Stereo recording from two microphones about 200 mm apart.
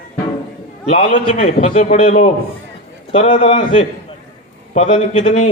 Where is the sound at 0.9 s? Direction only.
30° left (ahead or behind).